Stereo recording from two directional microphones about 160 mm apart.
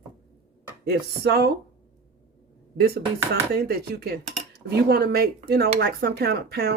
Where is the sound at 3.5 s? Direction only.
80° right.